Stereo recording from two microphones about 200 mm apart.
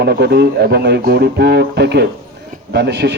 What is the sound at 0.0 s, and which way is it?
A man's voice, 55° right (ahead or behind).